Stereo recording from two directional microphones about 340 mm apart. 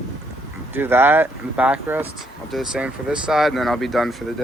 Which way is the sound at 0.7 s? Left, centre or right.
Centre.